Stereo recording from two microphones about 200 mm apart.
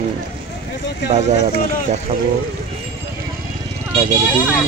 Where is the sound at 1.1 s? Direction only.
35° right (ahead or behind).